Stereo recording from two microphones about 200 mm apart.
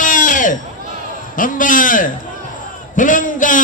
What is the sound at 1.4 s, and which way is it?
A man's voice, 40° left (ahead or behind).